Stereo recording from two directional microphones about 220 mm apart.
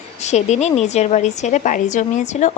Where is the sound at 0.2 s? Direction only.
30° left (ahead or behind).